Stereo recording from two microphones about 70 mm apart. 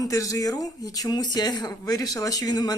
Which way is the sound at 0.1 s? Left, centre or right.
Left.